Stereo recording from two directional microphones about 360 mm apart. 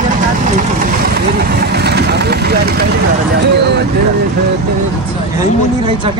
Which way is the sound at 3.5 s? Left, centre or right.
Right.